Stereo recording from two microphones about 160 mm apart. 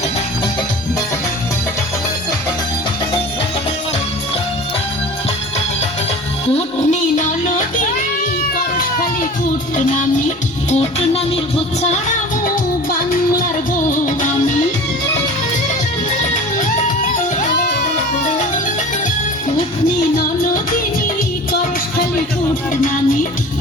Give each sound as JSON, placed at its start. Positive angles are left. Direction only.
{"t": 6.5, "sound": "music", "side_deg": 45}
{"t": 8.5, "sound": "cat", "side_deg": 60}
{"t": 10.7, "sound": "music", "side_deg": 40}
{"t": 13.9, "sound": "music", "side_deg": 50}
{"t": 22.7, "sound": "music", "side_deg": 55}